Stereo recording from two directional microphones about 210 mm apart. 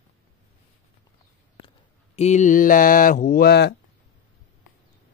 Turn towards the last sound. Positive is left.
turn(degrees=50)  # may be behind; listen again after turning